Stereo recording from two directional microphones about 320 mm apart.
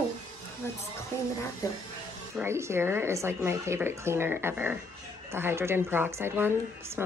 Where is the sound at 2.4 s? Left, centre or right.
Centre.